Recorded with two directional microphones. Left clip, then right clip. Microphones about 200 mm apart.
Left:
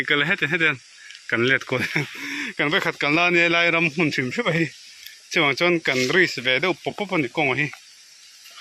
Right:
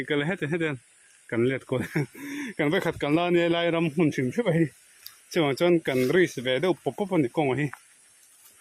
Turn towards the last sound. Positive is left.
turn(degrees=-20)  # may be behind; listen again after turning